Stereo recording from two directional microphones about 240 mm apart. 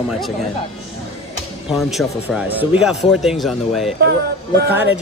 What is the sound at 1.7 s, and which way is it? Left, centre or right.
Speech, centre.